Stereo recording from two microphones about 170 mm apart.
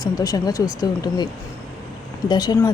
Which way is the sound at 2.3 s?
25° left (ahead or behind).